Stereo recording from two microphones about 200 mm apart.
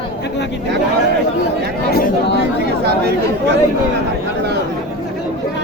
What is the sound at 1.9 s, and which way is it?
Speech, 50° left (ahead or behind).